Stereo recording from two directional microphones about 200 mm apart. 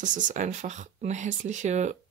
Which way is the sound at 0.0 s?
40° right (ahead or behind).